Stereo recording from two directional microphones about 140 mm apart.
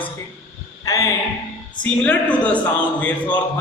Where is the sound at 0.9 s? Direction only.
25° left (ahead or behind).